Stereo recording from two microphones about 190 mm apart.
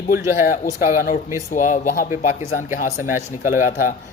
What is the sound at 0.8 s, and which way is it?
Speech, 45° left (ahead or behind).